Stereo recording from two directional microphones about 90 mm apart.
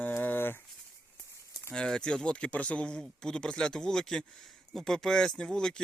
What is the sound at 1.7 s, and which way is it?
Speech, 10° left (ahead or behind).